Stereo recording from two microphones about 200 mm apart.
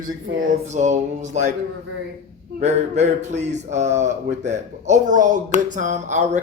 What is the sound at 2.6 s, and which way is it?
Speech, 35° right (ahead or behind).